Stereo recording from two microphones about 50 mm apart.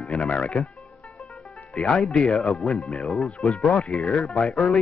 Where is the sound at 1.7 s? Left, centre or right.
Centre.